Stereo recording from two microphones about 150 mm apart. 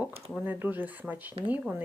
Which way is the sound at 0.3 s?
10° right (ahead or behind).